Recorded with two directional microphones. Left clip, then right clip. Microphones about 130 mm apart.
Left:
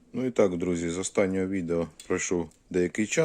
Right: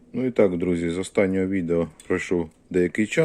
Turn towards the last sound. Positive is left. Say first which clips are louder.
# right 4 dB
turn(degrees=10)  # may be behind; listen again after turning